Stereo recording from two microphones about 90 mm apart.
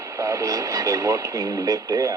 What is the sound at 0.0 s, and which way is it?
Speech, 35° right (ahead or behind).